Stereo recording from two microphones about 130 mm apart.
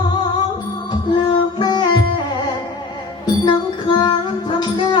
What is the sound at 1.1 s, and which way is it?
Music, 35° left (ahead or behind).